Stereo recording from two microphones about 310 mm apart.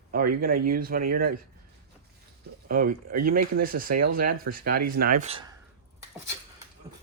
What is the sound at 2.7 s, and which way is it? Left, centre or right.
Speech, right.